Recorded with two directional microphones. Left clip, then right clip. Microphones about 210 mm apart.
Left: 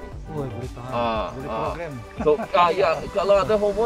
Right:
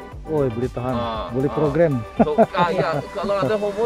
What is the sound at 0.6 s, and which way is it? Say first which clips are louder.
Speech: right 2 dB; 5° left (ahead or behind).